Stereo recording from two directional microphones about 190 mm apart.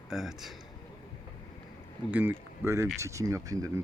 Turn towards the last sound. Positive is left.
turn(degrees=-15)  # may be behind; listen again after turning